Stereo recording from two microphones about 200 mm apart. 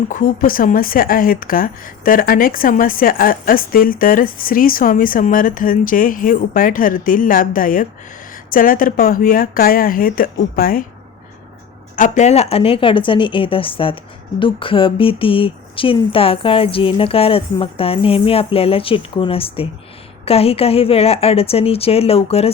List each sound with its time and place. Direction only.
0.1 s a woman's voice: 40° left (ahead or behind)
11.9 s a woman's voice: 35° left (ahead or behind)